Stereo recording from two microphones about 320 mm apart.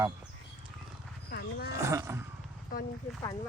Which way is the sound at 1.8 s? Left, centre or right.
Centre.